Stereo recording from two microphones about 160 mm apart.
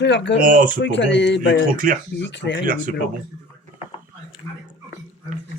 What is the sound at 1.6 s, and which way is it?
Speech, 60° right (ahead or behind).